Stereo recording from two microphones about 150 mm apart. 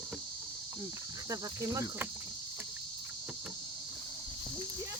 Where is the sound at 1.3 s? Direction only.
20° right (ahead or behind).